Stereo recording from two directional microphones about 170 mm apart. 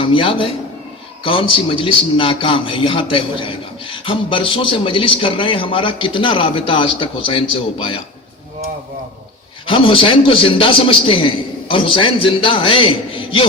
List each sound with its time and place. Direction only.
0.0 s a man's voice: 30° left (ahead or behind)
9.6 s a man's voice: 30° left (ahead or behind)